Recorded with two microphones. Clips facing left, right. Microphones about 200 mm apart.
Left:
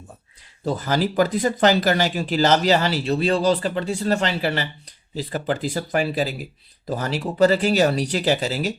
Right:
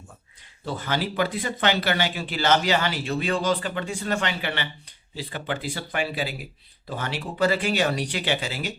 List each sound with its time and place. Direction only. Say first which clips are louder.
0.6 s speech: left 6 dB; 40° left (ahead or behind)